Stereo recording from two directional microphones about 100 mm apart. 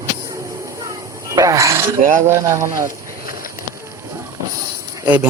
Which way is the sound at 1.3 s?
35° right (ahead or behind).